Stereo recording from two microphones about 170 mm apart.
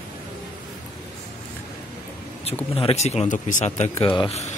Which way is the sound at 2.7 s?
35° left (ahead or behind).